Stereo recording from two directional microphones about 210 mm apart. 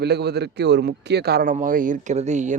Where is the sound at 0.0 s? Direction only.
50° right (ahead or behind).